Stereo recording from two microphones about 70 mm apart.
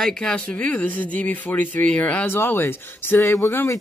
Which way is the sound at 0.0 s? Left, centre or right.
Centre.